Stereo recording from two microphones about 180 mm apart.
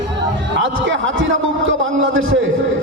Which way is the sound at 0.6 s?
90° right.